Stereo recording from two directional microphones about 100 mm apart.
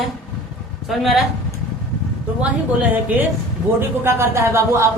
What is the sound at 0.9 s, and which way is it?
Speech, centre (ahead or behind).